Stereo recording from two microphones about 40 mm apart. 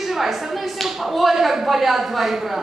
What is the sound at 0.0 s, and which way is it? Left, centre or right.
A man's voice, centre.